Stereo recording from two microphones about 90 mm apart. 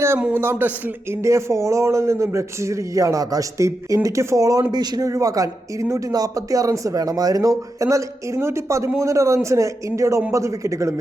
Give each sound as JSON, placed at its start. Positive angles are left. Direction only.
{"t": 0.3, "sound": "a man's voice", "side_deg": -25}